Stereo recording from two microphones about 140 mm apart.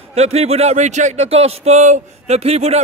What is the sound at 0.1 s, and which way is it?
A man's voice, 50° right (ahead or behind).